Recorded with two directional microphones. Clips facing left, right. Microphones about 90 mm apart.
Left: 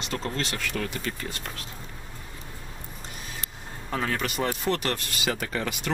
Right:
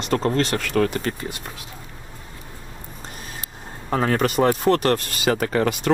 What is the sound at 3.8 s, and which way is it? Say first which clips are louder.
Speech: right 8 dB; 40° right (ahead or behind).